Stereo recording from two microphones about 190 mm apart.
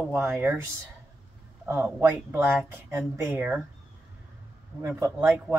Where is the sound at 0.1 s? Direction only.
10° right (ahead or behind).